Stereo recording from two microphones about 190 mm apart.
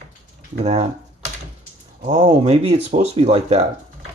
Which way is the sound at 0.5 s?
35° right (ahead or behind).